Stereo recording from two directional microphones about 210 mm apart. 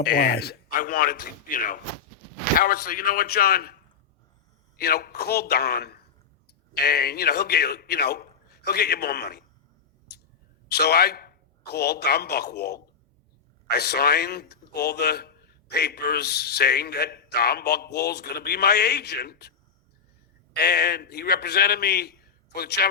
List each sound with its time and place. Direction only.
0.0 s speech: 45° left (ahead or behind)
2.8 s a man's voice: 45° left (ahead or behind)
4.8 s a man's voice: 45° left (ahead or behind)
10.7 s a man's voice: 50° left (ahead or behind)
20.6 s a man's voice: 50° left (ahead or behind)